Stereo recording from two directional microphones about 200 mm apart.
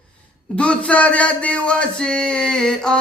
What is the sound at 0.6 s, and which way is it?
Mantra, 5° left (ahead or behind).